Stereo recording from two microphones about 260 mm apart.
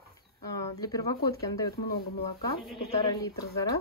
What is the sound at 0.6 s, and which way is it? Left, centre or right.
Speech, centre.